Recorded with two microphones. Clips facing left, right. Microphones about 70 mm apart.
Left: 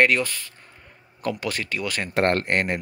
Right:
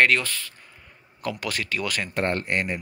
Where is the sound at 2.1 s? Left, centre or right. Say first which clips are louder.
Left 5 dB; left.